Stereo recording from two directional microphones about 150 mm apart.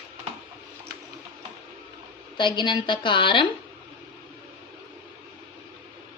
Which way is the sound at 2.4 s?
30° left (ahead or behind).